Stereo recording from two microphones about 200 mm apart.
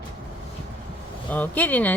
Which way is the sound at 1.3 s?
10° left (ahead or behind).